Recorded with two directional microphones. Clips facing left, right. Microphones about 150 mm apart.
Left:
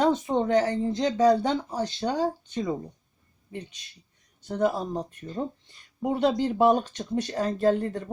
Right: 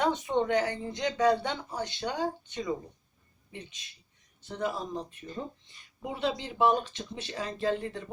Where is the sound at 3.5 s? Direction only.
45° left (ahead or behind).